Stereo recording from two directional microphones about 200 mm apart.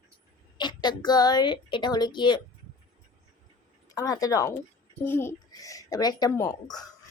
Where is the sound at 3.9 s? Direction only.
15° left (ahead or behind).